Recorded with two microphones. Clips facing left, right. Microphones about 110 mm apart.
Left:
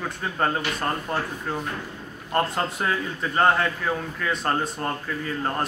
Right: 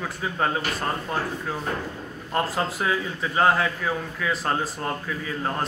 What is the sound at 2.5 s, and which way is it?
A man's voice, centre (ahead or behind).